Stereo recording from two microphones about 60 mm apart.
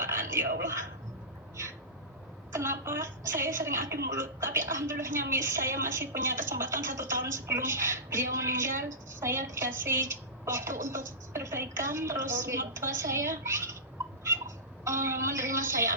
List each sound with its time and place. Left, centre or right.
0.0 s a sound: right
2.5 s a woman's voice: right
14.8 s a woman's voice: right